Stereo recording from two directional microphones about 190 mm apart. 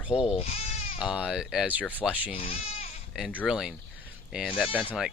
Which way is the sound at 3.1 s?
5° right (ahead or behind).